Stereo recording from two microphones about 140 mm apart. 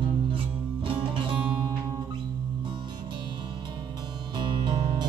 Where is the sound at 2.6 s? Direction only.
30° right (ahead or behind).